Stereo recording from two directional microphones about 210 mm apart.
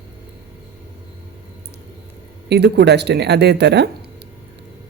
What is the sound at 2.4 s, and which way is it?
Speech, 50° right (ahead or behind).